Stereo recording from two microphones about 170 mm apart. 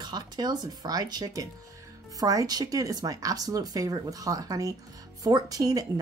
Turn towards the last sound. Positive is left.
turn(degrees=-20)  # may be behind; listen again after turning